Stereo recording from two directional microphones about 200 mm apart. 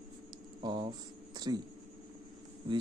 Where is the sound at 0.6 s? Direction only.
25° right (ahead or behind).